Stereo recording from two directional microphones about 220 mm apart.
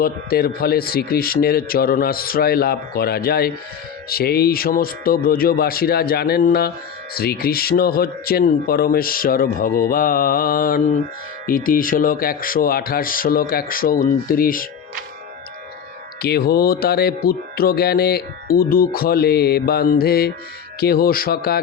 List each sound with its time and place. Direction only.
0.0 s music: 45° left (ahead or behind)
7.1 s speech: 45° left (ahead or behind)
16.2 s music: 45° left (ahead or behind)